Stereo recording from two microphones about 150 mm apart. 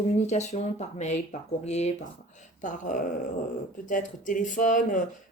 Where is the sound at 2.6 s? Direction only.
60° left (ahead or behind).